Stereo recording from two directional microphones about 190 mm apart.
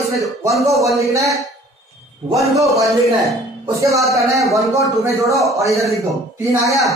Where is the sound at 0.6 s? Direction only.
15° right (ahead or behind).